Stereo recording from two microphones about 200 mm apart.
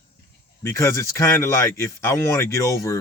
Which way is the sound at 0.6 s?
15° left (ahead or behind).